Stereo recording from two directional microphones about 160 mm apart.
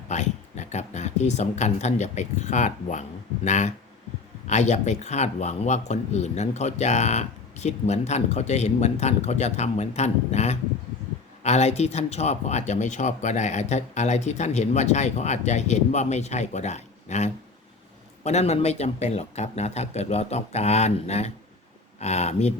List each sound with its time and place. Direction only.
0.1 s speech: 45° left (ahead or behind)